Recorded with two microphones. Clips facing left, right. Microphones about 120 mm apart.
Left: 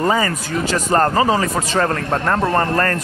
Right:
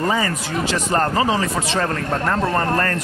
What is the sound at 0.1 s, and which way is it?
Speech, 45° left (ahead or behind).